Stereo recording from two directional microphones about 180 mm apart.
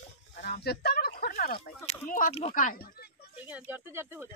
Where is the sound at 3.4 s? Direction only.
10° right (ahead or behind).